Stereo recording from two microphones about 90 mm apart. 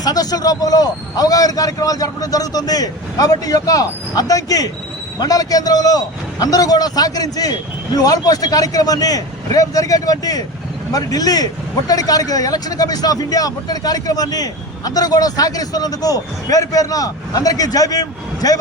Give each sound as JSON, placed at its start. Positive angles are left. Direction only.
{"t": 0.0, "sound": "speech", "side_deg": 45}